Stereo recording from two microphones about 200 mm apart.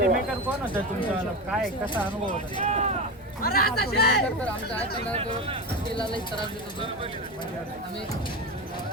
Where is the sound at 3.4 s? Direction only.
50° left (ahead or behind).